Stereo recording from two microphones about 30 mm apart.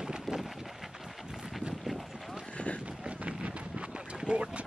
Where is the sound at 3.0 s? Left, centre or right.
Right.